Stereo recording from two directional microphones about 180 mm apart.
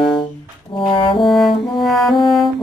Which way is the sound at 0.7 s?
30° left (ahead or behind).